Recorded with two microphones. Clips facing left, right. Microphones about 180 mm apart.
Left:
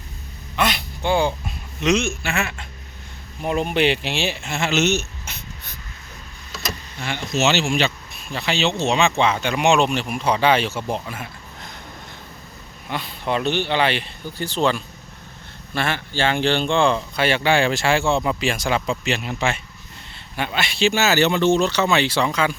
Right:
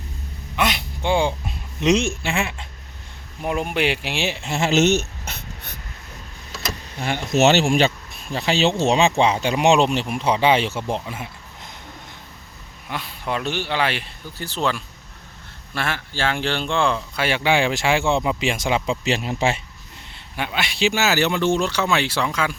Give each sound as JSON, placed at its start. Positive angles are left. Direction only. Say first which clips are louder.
{"t": 0.5, "sound": "a sound", "louder": "even", "side_deg": -20}
{"t": 1.8, "sound": "speech", "louder": "right 1 dB", "side_deg": -35}
{"t": 3.4, "sound": "speech", "louder": "left 2 dB", "side_deg": -10}
{"t": 4.4, "sound": "speech", "louder": "right 4 dB", "side_deg": -40}
{"t": 7.0, "sound": "speech", "louder": "right 4 dB", "side_deg": -50}
{"t": 12.9, "sound": "speech", "louder": "left 3 dB", "side_deg": -5}
{"t": 19.2, "sound": "speech", "louder": "right 2 dB", "side_deg": -35}
{"t": 20.3, "sound": "speech", "louder": "left 1 dB", "side_deg": -10}